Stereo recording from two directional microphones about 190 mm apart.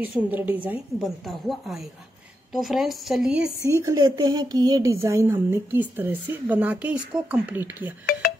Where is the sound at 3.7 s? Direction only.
15° right (ahead or behind).